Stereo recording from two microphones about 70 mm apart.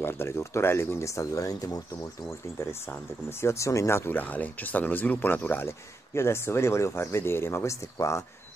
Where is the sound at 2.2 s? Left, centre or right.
Left.